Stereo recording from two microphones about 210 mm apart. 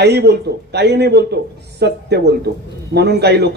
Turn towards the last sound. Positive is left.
turn(degrees=-50)  # may be behind; listen again after turning